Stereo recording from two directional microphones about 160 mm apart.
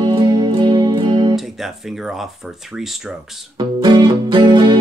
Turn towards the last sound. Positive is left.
turn(degrees=-30)  # may be behind; listen again after turning